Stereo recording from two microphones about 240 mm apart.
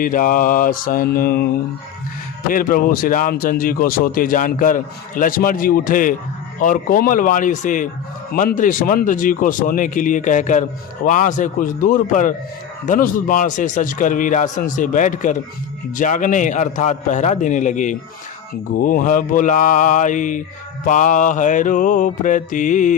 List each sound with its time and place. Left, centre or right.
0.0 s speech: left
2.5 s speech: left